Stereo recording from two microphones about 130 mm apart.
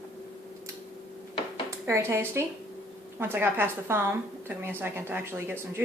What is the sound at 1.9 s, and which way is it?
A woman's voice, 20° right (ahead or behind).